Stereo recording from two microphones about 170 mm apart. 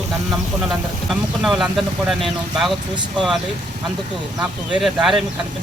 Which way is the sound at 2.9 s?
25° right (ahead or behind).